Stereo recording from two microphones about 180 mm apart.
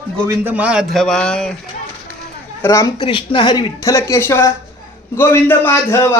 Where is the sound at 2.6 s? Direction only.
15° left (ahead or behind).